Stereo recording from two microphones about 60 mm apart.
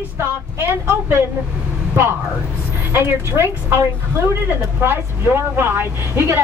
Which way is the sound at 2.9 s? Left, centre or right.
Right.